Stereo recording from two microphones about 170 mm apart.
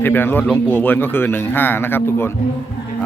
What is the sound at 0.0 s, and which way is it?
A man's voice, 10° left (ahead or behind).